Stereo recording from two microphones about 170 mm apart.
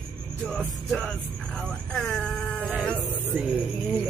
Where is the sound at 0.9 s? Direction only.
Centre (ahead or behind).